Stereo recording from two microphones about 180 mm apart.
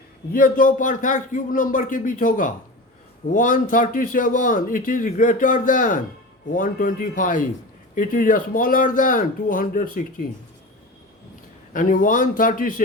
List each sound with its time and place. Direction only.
0.3 s speech: 50° left (ahead or behind)
11.7 s speech: 50° left (ahead or behind)